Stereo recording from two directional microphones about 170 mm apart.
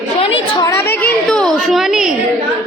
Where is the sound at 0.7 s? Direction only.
15° left (ahead or behind); by 2.1 s 5° right (ahead or behind).